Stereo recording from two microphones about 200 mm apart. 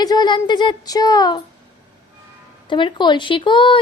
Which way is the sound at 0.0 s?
20° left (ahead or behind).